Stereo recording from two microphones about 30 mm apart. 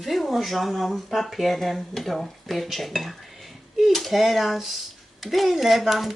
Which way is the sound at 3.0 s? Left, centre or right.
Centre.